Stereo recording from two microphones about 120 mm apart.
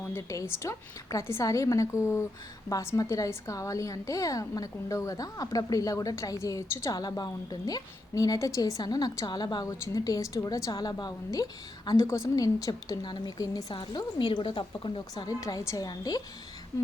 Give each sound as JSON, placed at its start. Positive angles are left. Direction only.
{"t": 0.1, "sound": "a woman's voice", "side_deg": 25}
{"t": 13.7, "sound": "a woman's voice", "side_deg": 45}
{"t": 15.1, "sound": "a woman's voice", "side_deg": 30}